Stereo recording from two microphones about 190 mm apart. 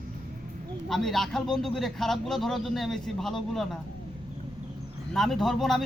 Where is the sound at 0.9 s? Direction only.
Centre (ahead or behind).